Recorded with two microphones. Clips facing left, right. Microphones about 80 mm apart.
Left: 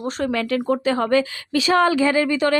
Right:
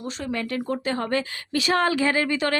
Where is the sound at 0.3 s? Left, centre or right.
Left.